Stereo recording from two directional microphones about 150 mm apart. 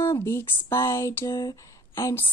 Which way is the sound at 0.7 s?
20° left (ahead or behind).